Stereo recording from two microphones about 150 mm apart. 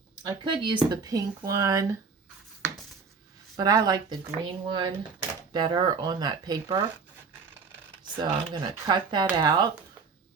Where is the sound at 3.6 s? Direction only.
25° right (ahead or behind).